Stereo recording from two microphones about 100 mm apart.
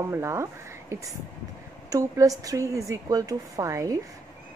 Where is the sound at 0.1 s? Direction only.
25° right (ahead or behind).